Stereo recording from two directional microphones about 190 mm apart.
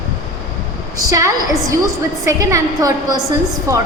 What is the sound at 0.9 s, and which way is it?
A woman's voice, 20° right (ahead or behind).